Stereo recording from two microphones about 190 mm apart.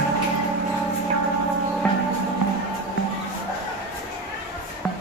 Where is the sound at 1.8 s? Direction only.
5° left (ahead or behind).